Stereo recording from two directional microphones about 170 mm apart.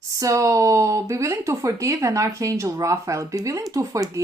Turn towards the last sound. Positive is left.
turn(degrees=-20)  # may be behind; listen again after turning